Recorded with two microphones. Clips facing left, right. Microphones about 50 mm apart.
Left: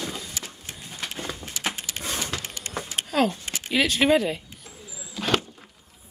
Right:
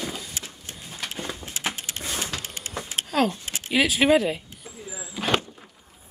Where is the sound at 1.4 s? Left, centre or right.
Centre.